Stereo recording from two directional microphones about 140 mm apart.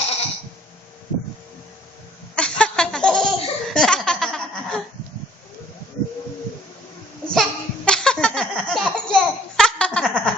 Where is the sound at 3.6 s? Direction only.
5° left (ahead or behind).